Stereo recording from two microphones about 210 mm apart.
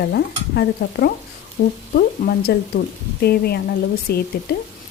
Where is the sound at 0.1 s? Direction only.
50° left (ahead or behind).